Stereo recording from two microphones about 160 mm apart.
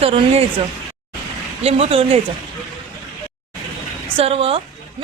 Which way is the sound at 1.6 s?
35° right (ahead or behind).